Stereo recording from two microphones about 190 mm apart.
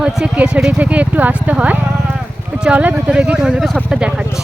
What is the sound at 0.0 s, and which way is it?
Speech, 5° right (ahead or behind).